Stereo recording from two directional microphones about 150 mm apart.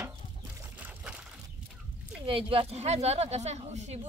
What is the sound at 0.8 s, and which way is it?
Pour, 5° right (ahead or behind).